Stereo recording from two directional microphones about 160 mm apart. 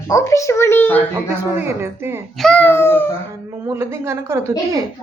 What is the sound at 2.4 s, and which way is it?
Speech, 5° left (ahead or behind).